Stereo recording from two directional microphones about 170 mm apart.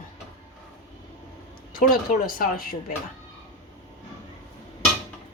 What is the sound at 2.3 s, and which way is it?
Speech, 60° left (ahead or behind).